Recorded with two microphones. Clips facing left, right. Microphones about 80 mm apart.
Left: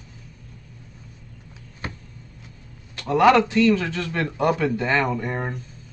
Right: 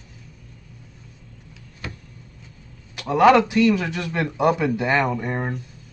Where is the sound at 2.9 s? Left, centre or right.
Centre.